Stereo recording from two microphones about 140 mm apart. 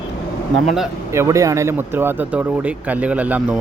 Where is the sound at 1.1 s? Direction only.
20° right (ahead or behind).